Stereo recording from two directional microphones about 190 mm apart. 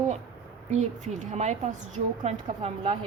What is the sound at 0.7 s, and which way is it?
A woman's voice, 40° right (ahead or behind).